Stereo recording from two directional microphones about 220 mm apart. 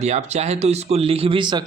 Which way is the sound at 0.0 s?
30° right (ahead or behind).